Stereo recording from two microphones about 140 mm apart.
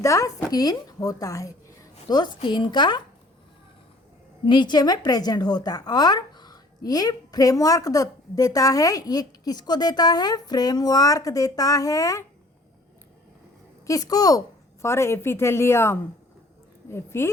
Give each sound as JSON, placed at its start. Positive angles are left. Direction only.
{"t": 0.0, "sound": "a woman's voice", "side_deg": 20}
{"t": 4.4, "sound": "speech", "side_deg": 35}
{"t": 13.8, "sound": "speech", "side_deg": 25}